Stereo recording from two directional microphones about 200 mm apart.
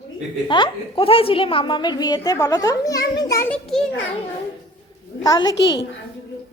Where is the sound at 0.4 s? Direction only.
25° left (ahead or behind).